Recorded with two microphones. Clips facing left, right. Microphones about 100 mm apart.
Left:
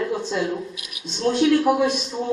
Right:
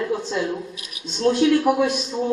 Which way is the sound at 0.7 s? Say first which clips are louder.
Even; 35° right (ahead or behind).